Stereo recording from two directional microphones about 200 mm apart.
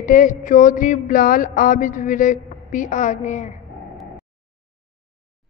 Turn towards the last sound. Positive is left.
turn(degrees=35)  # may be behind; listen again after turning